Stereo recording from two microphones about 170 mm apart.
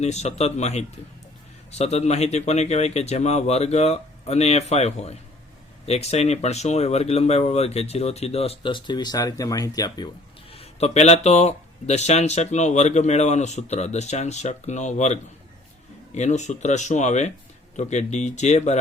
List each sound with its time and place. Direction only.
0.0 s speech: 40° left (ahead or behind); by 10.1 s 25° left (ahead or behind)
10.5 s speech: 35° left (ahead or behind)